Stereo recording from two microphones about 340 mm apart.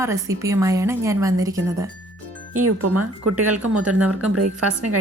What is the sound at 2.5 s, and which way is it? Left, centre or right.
Speech, right.